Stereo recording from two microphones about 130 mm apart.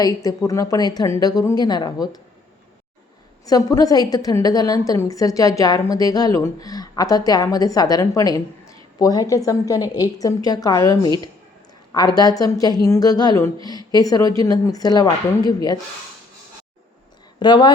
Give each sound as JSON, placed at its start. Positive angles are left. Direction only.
{"t": 0.0, "sound": "a woman's voice", "side_deg": 30}
{"t": 3.4, "sound": "a woman's voice", "side_deg": 30}
{"t": 17.4, "sound": "a woman's voice", "side_deg": 35}